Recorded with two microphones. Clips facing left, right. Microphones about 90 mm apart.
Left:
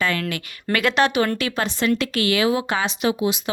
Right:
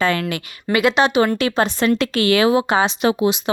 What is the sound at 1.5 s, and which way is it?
A woman's voice, 40° right (ahead or behind).